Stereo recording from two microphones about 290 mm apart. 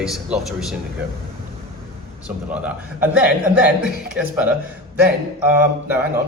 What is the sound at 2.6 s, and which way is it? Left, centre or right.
Speech, centre.